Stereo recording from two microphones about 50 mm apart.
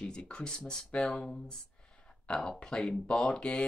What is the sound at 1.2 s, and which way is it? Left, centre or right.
Speech, left.